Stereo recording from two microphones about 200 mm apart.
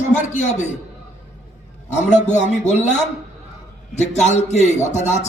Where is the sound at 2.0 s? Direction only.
35° left (ahead or behind).